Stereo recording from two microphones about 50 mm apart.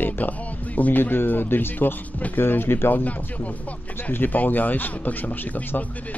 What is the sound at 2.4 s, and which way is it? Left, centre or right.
Speech, left.